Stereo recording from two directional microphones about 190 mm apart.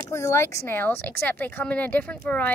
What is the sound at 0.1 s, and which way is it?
A woman's voice, 15° left (ahead or behind).